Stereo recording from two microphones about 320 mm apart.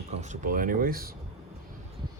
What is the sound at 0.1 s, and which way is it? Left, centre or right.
Speech, right.